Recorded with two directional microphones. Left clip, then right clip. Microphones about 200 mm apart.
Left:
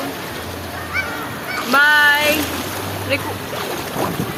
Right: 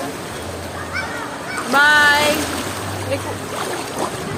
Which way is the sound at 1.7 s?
15° left (ahead or behind).